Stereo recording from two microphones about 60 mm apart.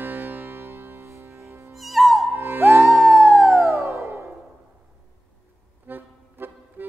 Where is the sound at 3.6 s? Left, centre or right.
Right.